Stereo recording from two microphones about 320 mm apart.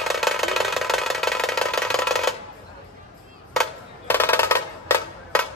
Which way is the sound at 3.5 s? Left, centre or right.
Centre.